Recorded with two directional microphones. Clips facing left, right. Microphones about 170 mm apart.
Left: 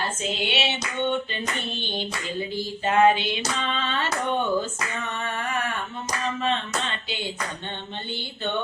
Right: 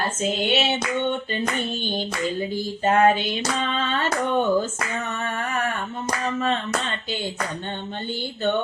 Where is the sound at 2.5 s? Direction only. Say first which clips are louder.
Right 1 dB; 45° right (ahead or behind).